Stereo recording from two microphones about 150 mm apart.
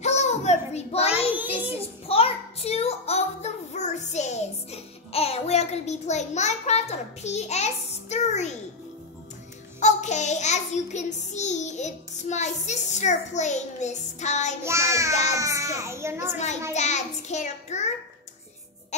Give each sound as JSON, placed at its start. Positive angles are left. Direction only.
{"t": 0.0, "sound": "child singing", "side_deg": 50}
{"t": 9.8, "sound": "child singing", "side_deg": 50}
{"t": 14.6, "sound": "a child's voice", "side_deg": -20}
{"t": 16.7, "sound": "child singing", "side_deg": 50}